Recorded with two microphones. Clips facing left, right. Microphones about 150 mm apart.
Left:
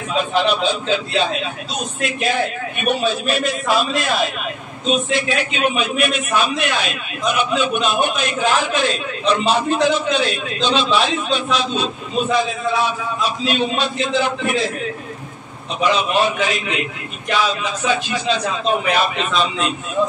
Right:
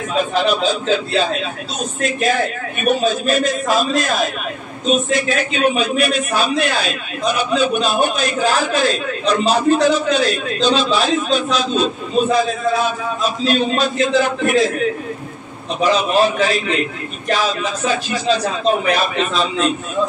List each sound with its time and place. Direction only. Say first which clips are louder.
0.3 s a man's voice: even; 40° right (ahead or behind)
15.8 s a man's voice: right 2 dB; 40° right (ahead or behind)